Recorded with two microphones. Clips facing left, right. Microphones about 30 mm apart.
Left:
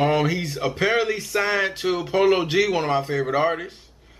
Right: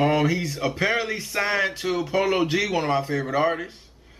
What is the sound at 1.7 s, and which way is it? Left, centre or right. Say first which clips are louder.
A man's voice: left 2 dB; centre.